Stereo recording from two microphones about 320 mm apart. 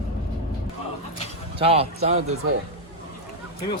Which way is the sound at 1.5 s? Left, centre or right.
Centre.